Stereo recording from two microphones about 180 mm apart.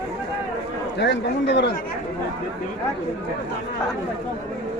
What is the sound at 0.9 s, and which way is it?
Speech, 75° left (ahead or behind).